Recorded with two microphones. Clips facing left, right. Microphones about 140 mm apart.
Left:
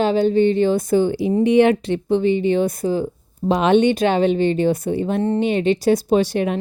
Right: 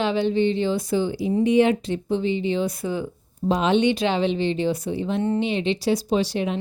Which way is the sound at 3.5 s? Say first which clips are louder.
Left 4 dB; 65° left (ahead or behind).